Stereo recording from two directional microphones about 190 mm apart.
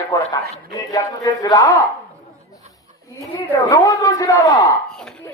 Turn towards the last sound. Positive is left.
turn(degrees=0)  # may be behind; listen again after turning